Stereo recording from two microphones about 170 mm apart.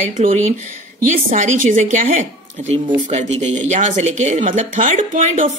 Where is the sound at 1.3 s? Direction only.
50° right (ahead or behind).